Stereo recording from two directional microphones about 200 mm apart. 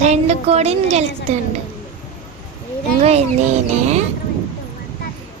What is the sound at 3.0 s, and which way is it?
Speech, 30° right (ahead or behind).